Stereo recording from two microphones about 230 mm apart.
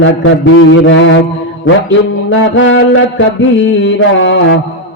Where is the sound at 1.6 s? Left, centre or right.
Left.